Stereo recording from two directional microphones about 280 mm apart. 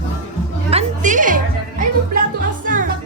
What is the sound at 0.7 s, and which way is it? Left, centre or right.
Chatter, right.